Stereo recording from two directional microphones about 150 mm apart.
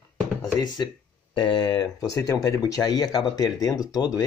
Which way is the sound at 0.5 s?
30° left (ahead or behind).